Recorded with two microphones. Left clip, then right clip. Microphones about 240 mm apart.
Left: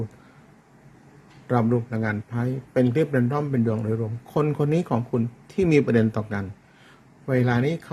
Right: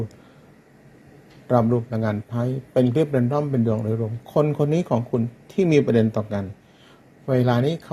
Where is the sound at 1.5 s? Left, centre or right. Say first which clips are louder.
Right 3 dB; centre.